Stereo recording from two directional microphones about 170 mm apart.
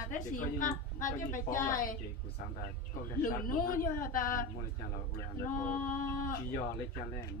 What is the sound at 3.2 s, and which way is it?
Speech, 55° left (ahead or behind).